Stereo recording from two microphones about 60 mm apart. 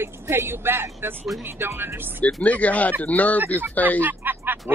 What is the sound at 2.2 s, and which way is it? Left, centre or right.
Speech, left.